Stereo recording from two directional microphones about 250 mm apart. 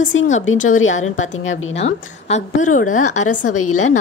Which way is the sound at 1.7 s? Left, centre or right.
Left.